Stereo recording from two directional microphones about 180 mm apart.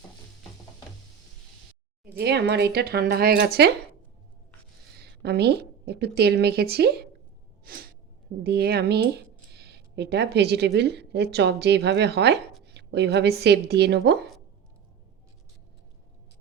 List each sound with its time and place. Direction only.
2.1 s speech: 65° right (ahead or behind)
4.9 s a woman's voice: 65° right (ahead or behind)
7.6 s gasp: 55° right (ahead or behind)
8.4 s a woman's voice: 60° right (ahead or behind)